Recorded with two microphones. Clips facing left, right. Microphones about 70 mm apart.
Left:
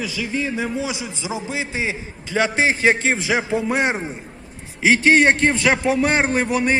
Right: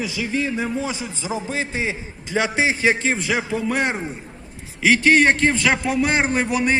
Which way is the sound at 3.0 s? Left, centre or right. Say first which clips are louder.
Left 2 dB; centre.